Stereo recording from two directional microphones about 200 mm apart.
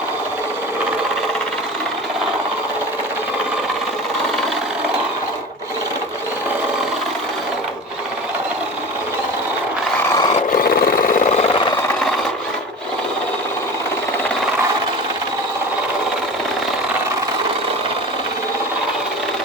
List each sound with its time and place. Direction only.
10.5 s vehicle: 45° left (ahead or behind)